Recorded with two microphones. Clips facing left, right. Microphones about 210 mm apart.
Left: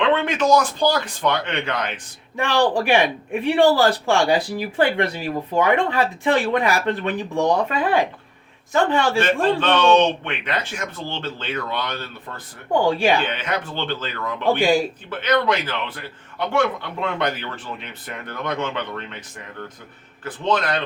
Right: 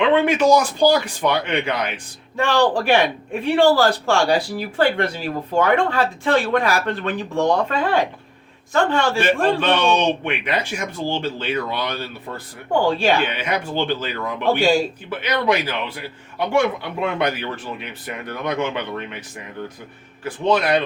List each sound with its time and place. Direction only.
0.0 s a man's voice: 10° right (ahead or behind)
2.3 s speech: 15° left (ahead or behind)
9.1 s a man's voice: 10° right (ahead or behind)
12.8 s speech: 15° left (ahead or behind)
13.2 s a man's voice: 10° right (ahead or behind)
14.6 s speech: 15° left (ahead or behind)
15.1 s a man's voice: 10° right (ahead or behind)
20.2 s a man's voice: 10° right (ahead or behind)